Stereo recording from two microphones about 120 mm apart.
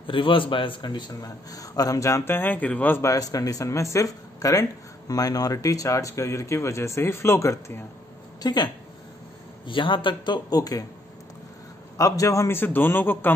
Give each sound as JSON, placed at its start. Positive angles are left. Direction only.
{"t": 0.0, "sound": "a man's voice", "side_deg": 45}
{"t": 9.7, "sound": "a man's voice", "side_deg": 45}
{"t": 12.0, "sound": "a man's voice", "side_deg": 25}